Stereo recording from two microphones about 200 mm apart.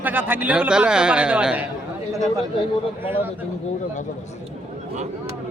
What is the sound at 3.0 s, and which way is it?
Speech, 10° right (ahead or behind).